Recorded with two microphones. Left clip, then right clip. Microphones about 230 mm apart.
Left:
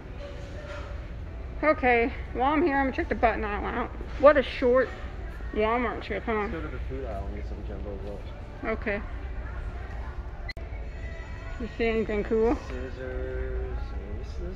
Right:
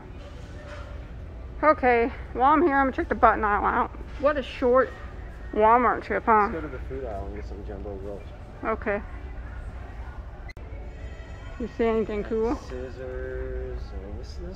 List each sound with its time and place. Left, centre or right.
1.6 s speech: centre
4.2 s speech: centre
8.6 s speech: centre
11.8 s speech: centre
12.2 s speech: centre